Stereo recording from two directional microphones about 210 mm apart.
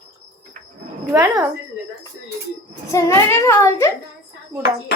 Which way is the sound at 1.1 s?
15° right (ahead or behind).